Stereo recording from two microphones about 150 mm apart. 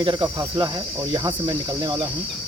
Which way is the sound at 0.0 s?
30° right (ahead or behind).